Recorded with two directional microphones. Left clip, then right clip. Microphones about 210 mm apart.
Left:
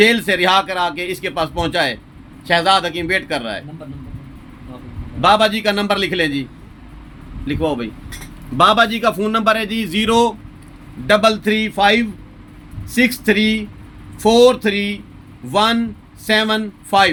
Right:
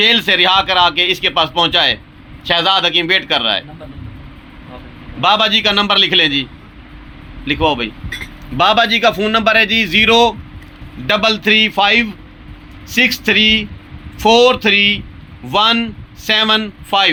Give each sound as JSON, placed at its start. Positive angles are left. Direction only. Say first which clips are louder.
{"t": 0.0, "sound": "speech", "louder": "right 2 dB", "side_deg": 10}
{"t": 5.2, "sound": "a man's voice", "louder": "right 1 dB", "side_deg": 15}